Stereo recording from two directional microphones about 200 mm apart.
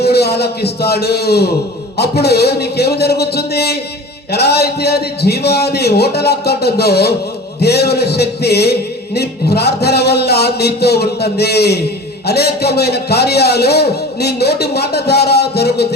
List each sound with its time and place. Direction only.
0.0 s music: 55° left (ahead or behind)